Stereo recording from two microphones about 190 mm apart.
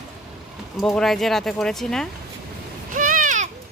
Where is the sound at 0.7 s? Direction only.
Centre (ahead or behind).